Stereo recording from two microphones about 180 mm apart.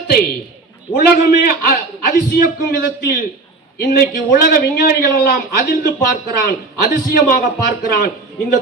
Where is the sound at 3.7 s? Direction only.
60° left (ahead or behind).